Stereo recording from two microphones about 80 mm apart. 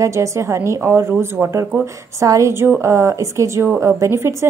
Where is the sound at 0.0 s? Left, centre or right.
Right.